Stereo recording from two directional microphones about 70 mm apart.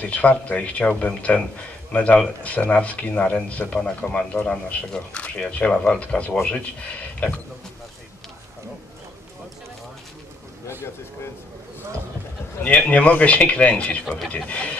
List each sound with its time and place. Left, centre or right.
0.0 s speech: left
12.6 s speech: centre